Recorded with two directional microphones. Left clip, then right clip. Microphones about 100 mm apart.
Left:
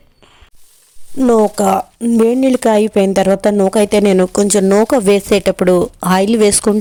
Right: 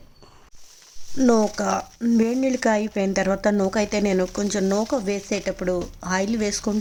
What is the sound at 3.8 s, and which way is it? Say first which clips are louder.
Speech: left 11 dB; 85° left.